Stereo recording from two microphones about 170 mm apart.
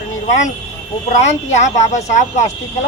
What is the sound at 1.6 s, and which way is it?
Speech, 45° left (ahead or behind).